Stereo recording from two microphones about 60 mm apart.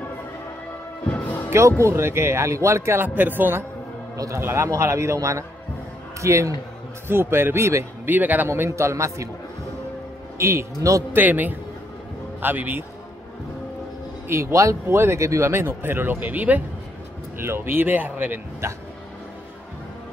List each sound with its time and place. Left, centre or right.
1.1 s music: left
1.8 s a man's voice: right
3.2 s a man's voice: right
7.1 s speech: right
8.1 s speech: right
8.5 s a man's voice: right
10.3 s a man's voice: right
11.1 s speech: right
14.2 s a man's voice: right
15.5 s speech: right
17.4 s speech: right
18.6 s a man's voice: right